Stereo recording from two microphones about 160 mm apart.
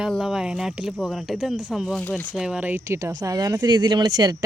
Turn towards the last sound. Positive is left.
turn(degrees=-25)  # may be behind; listen again after turning